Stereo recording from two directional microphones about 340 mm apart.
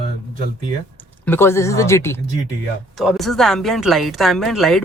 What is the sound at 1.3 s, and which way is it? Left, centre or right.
Speech, centre.